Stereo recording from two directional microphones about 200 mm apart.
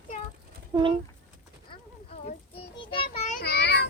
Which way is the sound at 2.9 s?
30° left (ahead or behind).